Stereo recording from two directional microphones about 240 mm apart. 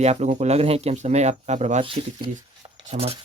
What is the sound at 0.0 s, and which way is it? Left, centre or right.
Speech, right.